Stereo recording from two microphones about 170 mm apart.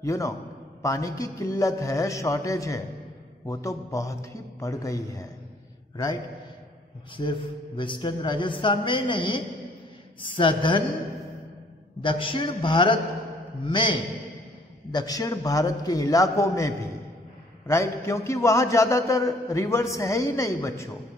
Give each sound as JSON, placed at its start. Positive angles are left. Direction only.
{"t": 0.0, "sound": "a man's voice", "side_deg": 20}
{"t": 7.2, "sound": "a man's voice", "side_deg": 30}
{"t": 12.0, "sound": "a man's voice", "side_deg": 30}